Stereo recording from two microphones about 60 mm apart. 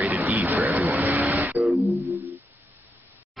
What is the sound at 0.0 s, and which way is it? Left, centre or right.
Vehicle, right.